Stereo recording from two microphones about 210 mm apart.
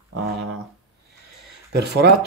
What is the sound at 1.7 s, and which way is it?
Speech, 50° right (ahead or behind).